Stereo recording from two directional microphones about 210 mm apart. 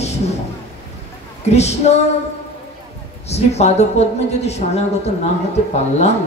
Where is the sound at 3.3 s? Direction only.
30° left (ahead or behind).